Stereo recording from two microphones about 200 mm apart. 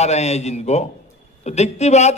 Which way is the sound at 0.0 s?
35° left (ahead or behind).